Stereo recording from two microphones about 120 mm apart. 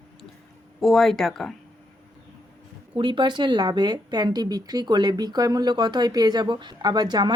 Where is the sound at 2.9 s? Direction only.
40° right (ahead or behind).